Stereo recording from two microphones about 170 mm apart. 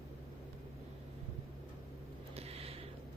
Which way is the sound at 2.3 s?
35° right (ahead or behind).